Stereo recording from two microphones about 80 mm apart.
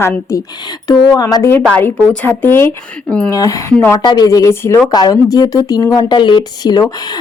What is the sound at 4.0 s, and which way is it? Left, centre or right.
Speech, left.